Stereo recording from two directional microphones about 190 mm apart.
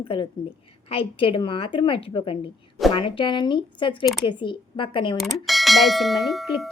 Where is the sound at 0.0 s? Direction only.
25° left (ahead or behind).